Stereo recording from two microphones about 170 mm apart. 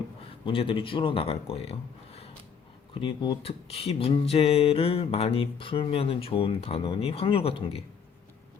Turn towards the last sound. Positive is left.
turn(degrees=35)  # may be behind; listen again after turning